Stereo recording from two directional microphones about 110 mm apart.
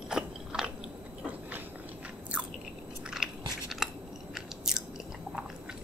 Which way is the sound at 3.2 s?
5° right (ahead or behind).